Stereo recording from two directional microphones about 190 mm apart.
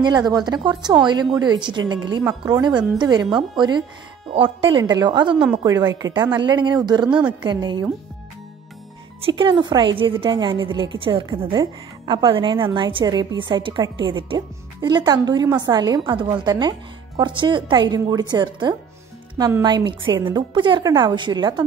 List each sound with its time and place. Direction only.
0.0 s a woman's voice: 20° right (ahead or behind)
9.2 s a woman's voice: 25° right (ahead or behind)